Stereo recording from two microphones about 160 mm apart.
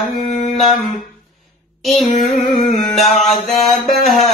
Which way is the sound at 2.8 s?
Centre (ahead or behind).